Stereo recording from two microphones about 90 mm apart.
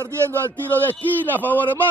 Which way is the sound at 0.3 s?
20° left (ahead or behind).